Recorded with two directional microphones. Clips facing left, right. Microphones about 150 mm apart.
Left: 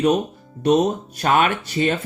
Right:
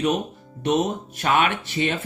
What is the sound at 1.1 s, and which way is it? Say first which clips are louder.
Speech: left 2 dB; 40° left (ahead or behind).